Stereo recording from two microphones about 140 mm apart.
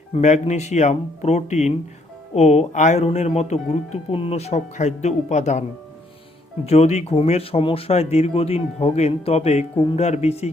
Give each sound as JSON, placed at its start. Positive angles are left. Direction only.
{"t": 0.1, "sound": "speech", "side_deg": 55}
{"t": 6.7, "sound": "speech", "side_deg": 50}